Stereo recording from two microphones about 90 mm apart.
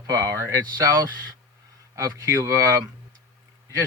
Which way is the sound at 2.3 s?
35° right (ahead or behind).